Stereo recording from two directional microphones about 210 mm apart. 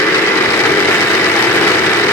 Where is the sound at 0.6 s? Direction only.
10° left (ahead or behind).